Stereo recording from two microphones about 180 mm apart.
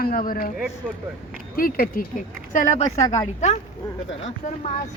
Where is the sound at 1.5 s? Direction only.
50° left (ahead or behind).